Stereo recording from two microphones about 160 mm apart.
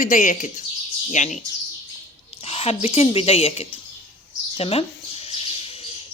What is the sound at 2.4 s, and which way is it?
Speech, 40° left (ahead or behind).